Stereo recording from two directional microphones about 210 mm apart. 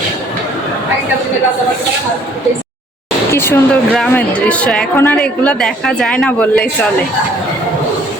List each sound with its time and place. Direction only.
3.3 s a woman's voice: 10° left (ahead or behind)